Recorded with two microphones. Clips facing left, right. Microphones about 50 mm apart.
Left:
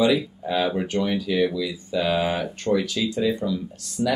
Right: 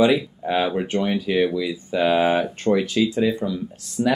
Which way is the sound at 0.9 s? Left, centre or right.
Right.